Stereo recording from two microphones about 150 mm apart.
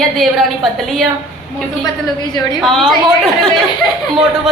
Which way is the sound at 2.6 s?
Centre (ahead or behind).